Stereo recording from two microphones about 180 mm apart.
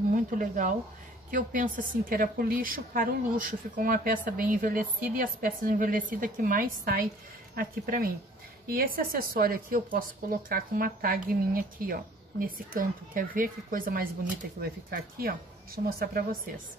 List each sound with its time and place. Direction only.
0.1 s speech: 45° right (ahead or behind)